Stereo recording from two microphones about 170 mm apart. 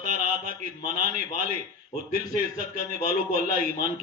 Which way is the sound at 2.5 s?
55° right (ahead or behind).